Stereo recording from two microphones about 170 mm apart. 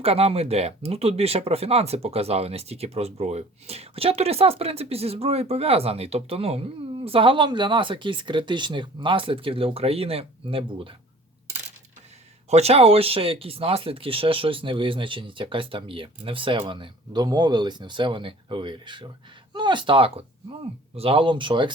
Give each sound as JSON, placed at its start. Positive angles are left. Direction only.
{"t": 0.0, "sound": "speech", "side_deg": -35}
{"t": 12.5, "sound": "speech", "side_deg": -40}